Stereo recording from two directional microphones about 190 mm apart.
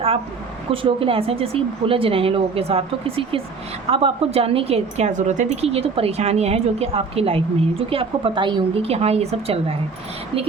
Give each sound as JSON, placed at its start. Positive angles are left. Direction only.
{"t": 0.7, "sound": "a woman's voice", "side_deg": -30}